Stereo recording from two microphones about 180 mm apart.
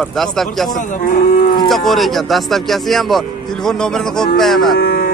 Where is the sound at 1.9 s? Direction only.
Centre (ahead or behind).